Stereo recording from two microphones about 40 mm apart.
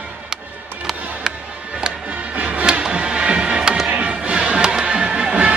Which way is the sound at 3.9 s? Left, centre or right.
Right.